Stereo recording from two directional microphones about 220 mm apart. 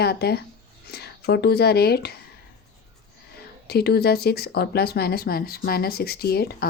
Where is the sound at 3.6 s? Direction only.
45° left (ahead or behind).